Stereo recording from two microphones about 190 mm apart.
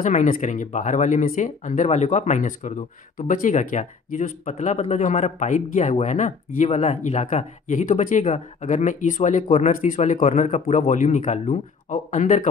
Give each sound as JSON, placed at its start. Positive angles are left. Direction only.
{"t": 0.0, "sound": "speech", "side_deg": 40}